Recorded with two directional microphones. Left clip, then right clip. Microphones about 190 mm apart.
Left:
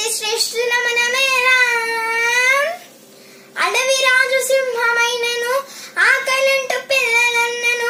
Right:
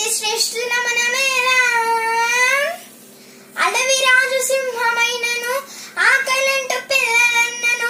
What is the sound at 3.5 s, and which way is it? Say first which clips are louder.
Child singing: even; centre (ahead or behind).